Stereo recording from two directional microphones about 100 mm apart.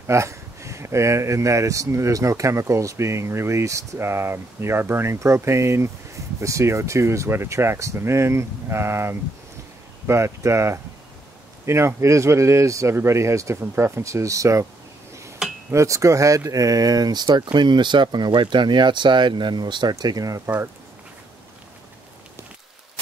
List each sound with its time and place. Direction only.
0.0 s speech: 30° right (ahead or behind)
15.7 s speech: 30° right (ahead or behind)